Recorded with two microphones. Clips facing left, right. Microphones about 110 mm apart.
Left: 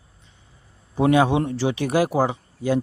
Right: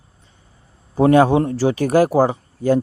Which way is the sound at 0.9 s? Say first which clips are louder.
Right 5 dB; 40° right (ahead or behind).